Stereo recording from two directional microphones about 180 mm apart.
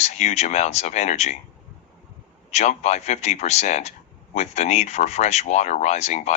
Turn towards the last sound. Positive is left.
turn(degrees=40)  # may be behind; listen again after turning